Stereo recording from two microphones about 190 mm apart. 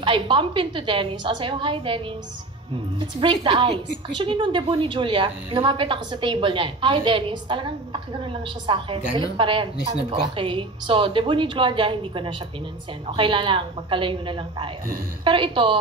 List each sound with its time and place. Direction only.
0.0 s a woman's voice: 25° right (ahead or behind)
3.0 s a woman's voice: 25° right (ahead or behind)